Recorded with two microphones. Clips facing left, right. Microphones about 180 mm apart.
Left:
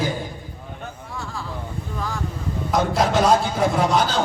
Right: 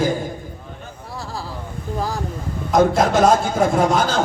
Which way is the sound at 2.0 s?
35° right (ahead or behind).